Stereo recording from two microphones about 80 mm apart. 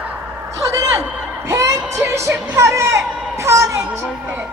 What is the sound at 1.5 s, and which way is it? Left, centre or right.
Music, right.